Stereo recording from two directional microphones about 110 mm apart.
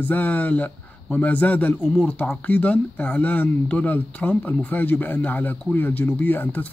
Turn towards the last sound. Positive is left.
turn(degrees=15)  # may be behind; listen again after turning